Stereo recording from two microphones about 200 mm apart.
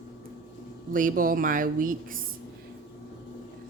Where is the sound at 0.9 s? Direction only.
45° right (ahead or behind).